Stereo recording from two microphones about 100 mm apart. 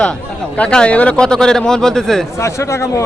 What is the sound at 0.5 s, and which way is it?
A man's voice, 10° left (ahead or behind).